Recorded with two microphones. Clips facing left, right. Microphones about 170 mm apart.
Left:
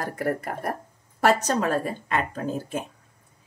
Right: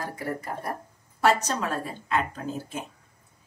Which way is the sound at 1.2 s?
50° left (ahead or behind).